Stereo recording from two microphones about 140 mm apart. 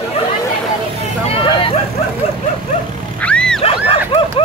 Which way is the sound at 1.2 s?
40° left (ahead or behind).